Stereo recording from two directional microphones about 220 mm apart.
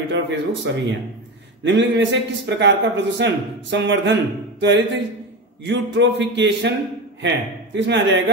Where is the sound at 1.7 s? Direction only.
55° right (ahead or behind).